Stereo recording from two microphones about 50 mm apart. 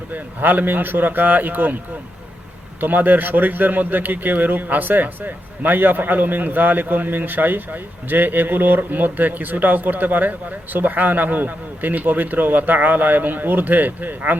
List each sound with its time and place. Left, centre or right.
0.1 s a man's voice: right
2.8 s a man's voice: right